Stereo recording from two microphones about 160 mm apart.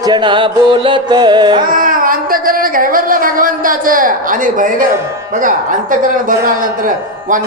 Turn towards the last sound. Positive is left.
turn(degrees=-55)  # may be behind; listen again after turning